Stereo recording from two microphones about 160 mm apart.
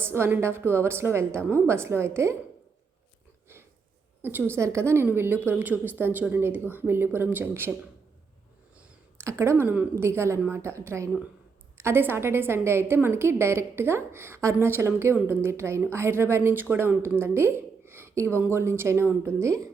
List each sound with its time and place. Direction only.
0.0 s a woman's voice: 15° right (ahead or behind)
4.2 s a woman's voice: 10° right (ahead or behind)
9.1 s a woman's voice: 15° right (ahead or behind)